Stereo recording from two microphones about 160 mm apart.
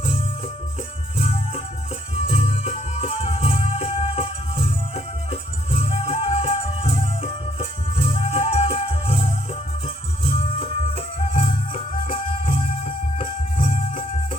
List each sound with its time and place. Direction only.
2.1 s music: 40° left (ahead or behind)